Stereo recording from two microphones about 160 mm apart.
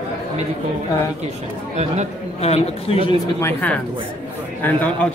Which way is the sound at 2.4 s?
40° left (ahead or behind).